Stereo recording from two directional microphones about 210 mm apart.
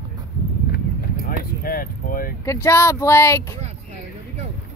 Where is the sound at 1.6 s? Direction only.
45° left (ahead or behind).